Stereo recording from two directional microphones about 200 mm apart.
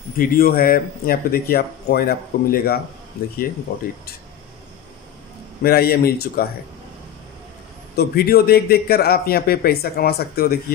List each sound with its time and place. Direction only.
0.2 s a man's voice: 45° left (ahead or behind)
5.6 s a man's voice: 50° left (ahead or behind)
7.9 s a man's voice: 50° left (ahead or behind)